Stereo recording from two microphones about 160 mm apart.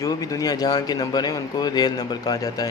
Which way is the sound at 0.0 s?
20° left (ahead or behind).